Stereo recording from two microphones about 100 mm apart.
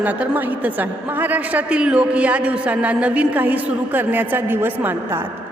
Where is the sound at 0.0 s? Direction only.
15° right (ahead or behind).